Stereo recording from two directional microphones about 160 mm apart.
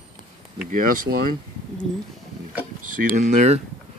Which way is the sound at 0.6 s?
60° right (ahead or behind).